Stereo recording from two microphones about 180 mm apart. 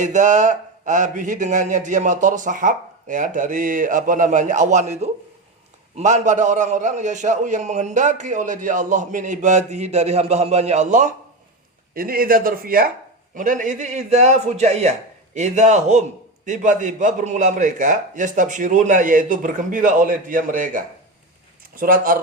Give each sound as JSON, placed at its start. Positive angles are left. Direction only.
{"t": 0.0, "sound": "a man's voice", "side_deg": -40}
{"t": 11.9, "sound": "a man's voice", "side_deg": -55}